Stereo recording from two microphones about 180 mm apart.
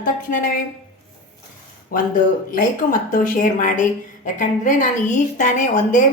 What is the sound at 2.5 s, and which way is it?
A woman's voice, 45° left (ahead or behind).